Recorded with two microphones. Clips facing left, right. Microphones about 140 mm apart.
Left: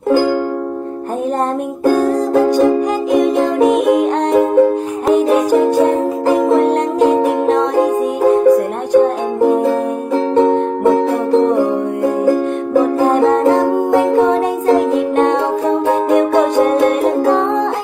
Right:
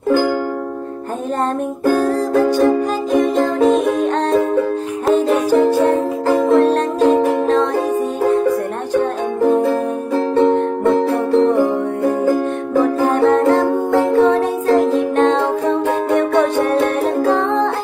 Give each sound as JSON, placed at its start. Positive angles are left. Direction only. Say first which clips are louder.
{"t": 1.9, "sound": "music", "louder": "left 3 dB", "side_deg": 15}